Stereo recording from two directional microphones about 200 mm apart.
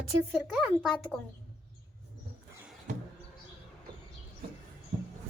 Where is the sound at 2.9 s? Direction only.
40° right (ahead or behind).